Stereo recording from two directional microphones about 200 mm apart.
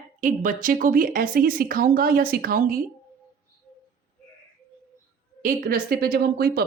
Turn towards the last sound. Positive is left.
turn(degrees=-50)  # may be behind; listen again after turning